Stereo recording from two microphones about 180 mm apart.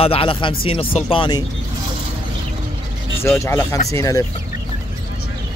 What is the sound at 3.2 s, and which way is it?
Speech, 15° left (ahead or behind).